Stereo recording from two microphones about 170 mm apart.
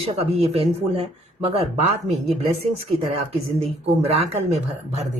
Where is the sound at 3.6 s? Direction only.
35° right (ahead or behind).